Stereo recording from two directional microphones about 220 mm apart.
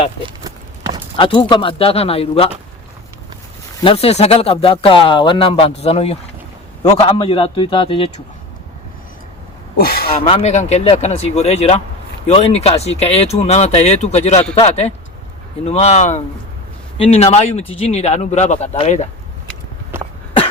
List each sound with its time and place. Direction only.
0.2 s horse: 20° right (ahead or behind)
1.1 s speech: 25° left (ahead or behind)
3.8 s speech: 25° left (ahead or behind)
9.7 s speech: 45° left (ahead or behind)
10.2 s speech: 30° left (ahead or behind)